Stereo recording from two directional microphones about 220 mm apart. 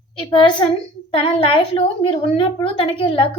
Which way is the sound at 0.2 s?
20° left (ahead or behind).